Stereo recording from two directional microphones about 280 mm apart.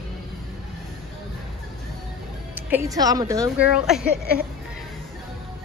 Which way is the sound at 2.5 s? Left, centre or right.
Centre.